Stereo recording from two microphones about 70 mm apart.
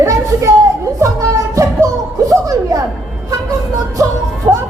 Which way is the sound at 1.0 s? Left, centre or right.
Right.